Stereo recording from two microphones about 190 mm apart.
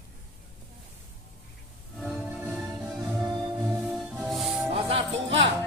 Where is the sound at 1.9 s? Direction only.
5° left (ahead or behind).